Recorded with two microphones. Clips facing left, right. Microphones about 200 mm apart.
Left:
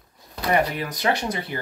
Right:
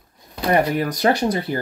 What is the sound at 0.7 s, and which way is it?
Speech, 40° right (ahead or behind).